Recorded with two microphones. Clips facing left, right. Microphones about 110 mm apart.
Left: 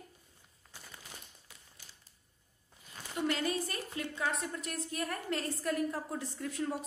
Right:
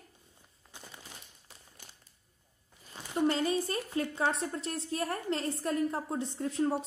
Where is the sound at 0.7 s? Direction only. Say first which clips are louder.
Right 3 dB; 20° right (ahead or behind).